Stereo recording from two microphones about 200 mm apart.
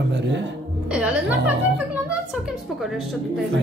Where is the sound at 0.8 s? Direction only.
5° right (ahead or behind).